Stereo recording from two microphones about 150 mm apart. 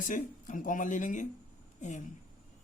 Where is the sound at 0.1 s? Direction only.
60° left (ahead or behind).